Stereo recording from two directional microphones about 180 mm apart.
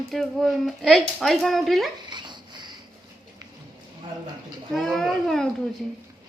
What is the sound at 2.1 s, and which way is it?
Dog, 25° right (ahead or behind).